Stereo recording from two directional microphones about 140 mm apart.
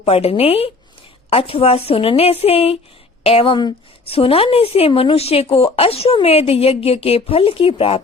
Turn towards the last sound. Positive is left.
turn(degrees=40)  # may be behind; listen again after turning